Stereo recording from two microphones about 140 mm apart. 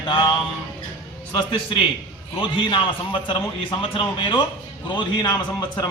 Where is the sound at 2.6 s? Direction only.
35° left (ahead or behind).